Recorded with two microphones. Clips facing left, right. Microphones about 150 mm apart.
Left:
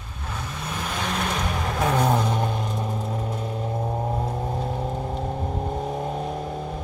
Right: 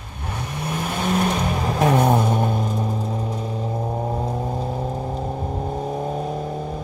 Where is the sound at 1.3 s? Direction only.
25° right (ahead or behind).